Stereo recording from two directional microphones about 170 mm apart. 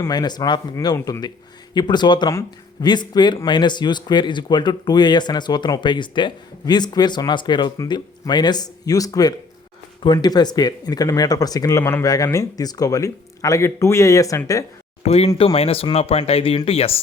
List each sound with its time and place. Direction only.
0.0 s speech: 25° left (ahead or behind)
15.0 s speech: 35° left (ahead or behind)